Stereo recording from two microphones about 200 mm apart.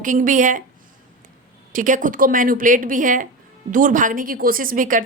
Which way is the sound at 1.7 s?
40° right (ahead or behind).